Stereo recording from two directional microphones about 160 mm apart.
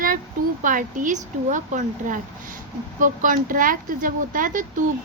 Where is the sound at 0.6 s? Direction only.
55° right (ahead or behind).